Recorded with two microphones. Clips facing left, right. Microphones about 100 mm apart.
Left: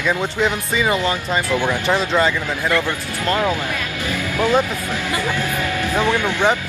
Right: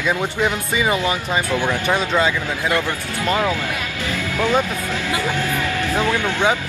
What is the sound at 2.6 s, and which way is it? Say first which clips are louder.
Speech: left 1 dB; 20° right (ahead or behind).